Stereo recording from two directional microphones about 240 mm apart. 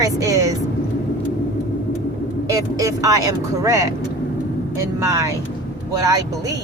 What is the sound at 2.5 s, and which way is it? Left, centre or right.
Speech, centre.